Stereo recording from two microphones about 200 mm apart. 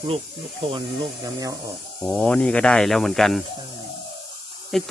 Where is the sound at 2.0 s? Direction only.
5° left (ahead or behind).